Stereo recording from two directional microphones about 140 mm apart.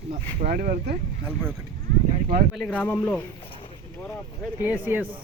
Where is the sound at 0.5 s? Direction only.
90° right.